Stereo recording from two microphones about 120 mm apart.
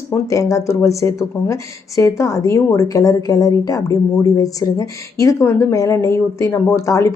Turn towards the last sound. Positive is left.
turn(degrees=25)  # may be behind; listen again after turning